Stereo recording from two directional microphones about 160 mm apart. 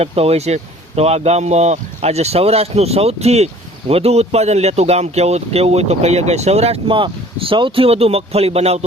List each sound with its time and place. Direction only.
0.0 s speech: 40° right (ahead or behind)